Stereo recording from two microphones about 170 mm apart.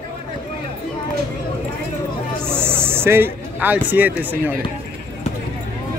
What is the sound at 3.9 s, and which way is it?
Speech, 10° right (ahead or behind).